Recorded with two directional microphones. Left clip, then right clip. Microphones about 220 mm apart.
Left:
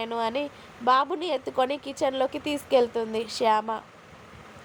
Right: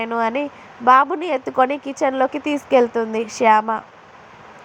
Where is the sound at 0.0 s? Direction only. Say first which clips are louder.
Right 7 dB; centre (ahead or behind).